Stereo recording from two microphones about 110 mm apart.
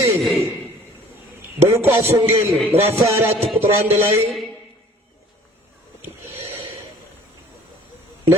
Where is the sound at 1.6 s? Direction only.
25° right (ahead or behind).